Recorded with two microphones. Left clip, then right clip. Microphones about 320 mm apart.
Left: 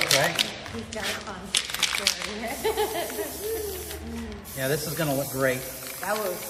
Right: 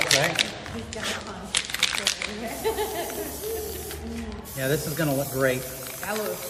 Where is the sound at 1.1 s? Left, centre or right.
Centre.